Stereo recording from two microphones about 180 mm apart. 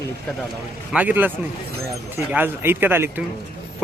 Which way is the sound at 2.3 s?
10° right (ahead or behind).